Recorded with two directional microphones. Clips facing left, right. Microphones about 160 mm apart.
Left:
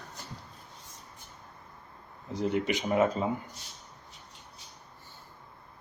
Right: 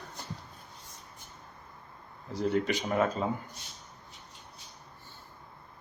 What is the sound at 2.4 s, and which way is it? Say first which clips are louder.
Speech: even; 20° left (ahead or behind).